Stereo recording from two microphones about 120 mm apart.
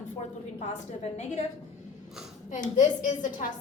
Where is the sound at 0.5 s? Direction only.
75° left (ahead or behind).